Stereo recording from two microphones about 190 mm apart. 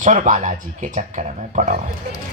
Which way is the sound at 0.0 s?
40° right (ahead or behind).